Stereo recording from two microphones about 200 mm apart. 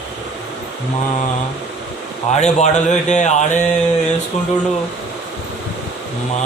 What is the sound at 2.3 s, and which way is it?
Speech, 35° left (ahead or behind).